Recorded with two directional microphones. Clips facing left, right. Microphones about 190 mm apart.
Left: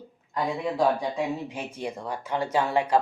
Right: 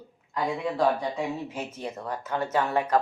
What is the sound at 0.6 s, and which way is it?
Speech, 10° left (ahead or behind).